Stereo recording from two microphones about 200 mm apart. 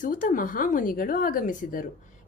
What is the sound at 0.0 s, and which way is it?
A woman's voice, 40° left (ahead or behind).